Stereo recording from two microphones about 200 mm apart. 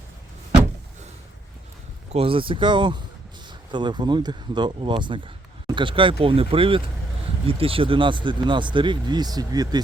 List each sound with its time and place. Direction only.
2.1 s speech: 25° right (ahead or behind)